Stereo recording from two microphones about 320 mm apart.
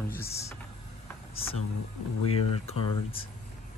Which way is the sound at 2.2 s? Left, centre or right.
Centre.